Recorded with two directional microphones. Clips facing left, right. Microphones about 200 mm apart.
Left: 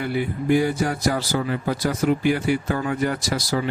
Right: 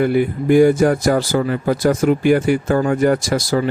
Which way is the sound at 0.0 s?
50° right (ahead or behind).